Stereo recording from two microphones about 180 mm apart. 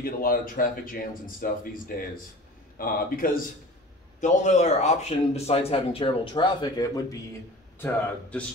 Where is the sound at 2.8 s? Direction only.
50° left (ahead or behind).